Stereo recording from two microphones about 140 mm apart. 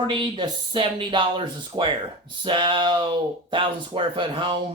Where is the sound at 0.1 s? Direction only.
35° right (ahead or behind).